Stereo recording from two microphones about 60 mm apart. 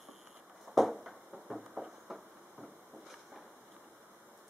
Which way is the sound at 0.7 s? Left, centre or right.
Centre.